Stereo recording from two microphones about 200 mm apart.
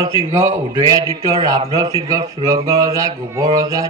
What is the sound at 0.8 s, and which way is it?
Mantra, 15° right (ahead or behind).